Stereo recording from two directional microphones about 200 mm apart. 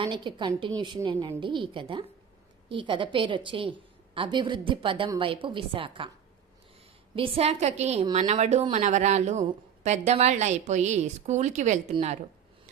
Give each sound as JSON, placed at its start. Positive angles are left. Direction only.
{"t": 0.0, "sound": "a woman's voice", "side_deg": -25}
{"t": 7.2, "sound": "speech", "side_deg": -30}